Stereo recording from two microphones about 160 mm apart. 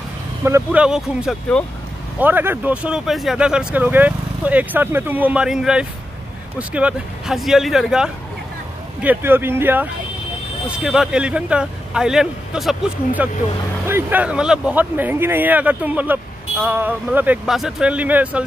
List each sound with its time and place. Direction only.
0.4 s speech: 15° right (ahead or behind)
0.7 s speech: 5° right (ahead or behind)
13.8 s speech: 10° right (ahead or behind)